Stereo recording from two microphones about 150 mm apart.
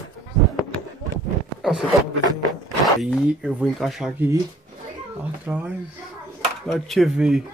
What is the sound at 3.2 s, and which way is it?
Speech, 5° right (ahead or behind).